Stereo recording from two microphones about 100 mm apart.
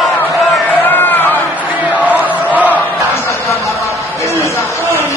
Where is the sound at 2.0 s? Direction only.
15° right (ahead or behind).